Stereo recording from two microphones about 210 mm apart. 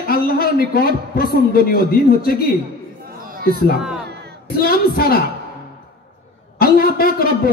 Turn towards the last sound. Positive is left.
turn(degrees=45)  # may be behind; listen again after turning